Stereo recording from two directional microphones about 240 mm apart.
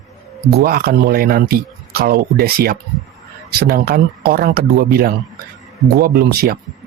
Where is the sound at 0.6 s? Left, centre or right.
Right.